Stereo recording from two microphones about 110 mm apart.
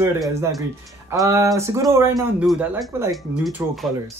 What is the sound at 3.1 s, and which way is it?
Speech, centre (ahead or behind).